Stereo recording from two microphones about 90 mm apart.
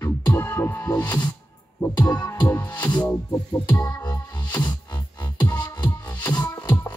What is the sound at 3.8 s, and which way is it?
Music, 50° left (ahead or behind).